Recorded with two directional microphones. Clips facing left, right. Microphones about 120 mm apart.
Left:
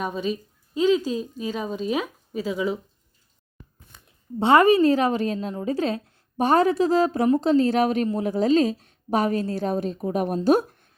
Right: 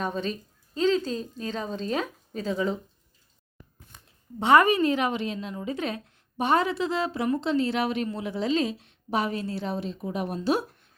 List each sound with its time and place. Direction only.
0.0 s a woman's voice: 10° left (ahead or behind)
4.4 s a woman's voice: 30° left (ahead or behind); by 10.8 s 45° left (ahead or behind)